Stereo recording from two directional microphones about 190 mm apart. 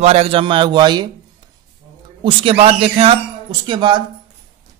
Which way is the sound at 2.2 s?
30° right (ahead or behind).